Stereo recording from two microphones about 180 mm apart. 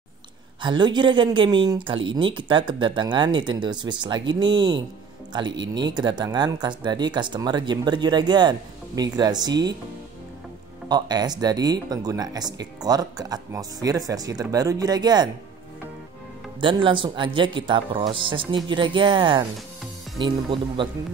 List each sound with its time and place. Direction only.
0.6 s speech: 25° right (ahead or behind)
10.9 s speech: 25° right (ahead or behind)
16.6 s speech: 25° right (ahead or behind)